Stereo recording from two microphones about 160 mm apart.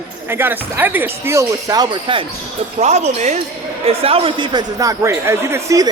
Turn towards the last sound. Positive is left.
turn(degrees=-15)  # may be behind; listen again after turning